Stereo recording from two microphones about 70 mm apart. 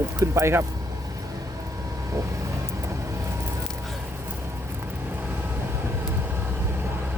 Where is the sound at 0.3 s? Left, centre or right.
Right.